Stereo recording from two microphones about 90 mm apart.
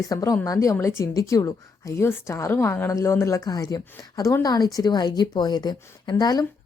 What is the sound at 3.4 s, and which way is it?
Speech, 45° left (ahead or behind).